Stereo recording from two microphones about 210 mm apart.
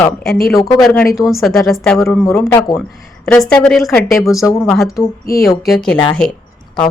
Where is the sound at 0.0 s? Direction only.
5° left (ahead or behind).